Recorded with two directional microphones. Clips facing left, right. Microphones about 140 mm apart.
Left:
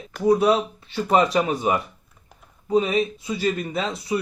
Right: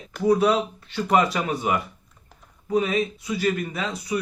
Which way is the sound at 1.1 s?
25° left (ahead or behind).